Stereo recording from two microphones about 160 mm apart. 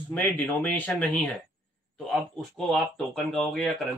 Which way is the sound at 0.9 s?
Centre (ahead or behind).